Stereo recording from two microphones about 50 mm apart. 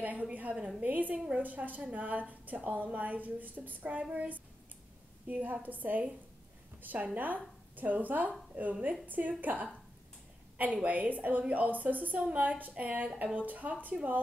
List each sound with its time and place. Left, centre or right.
0.0 s a woman's voice: right